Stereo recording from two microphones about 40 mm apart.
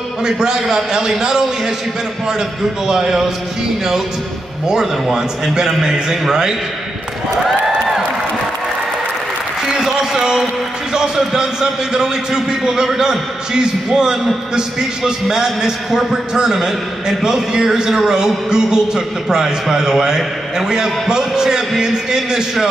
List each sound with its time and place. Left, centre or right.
0.2 s a man's voice: centre
2.9 s a man's voice: centre
5.1 s a man's voice: centre
9.7 s a sound: centre
10.9 s a man's voice: centre